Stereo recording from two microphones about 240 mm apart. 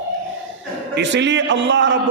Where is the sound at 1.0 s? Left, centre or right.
Right.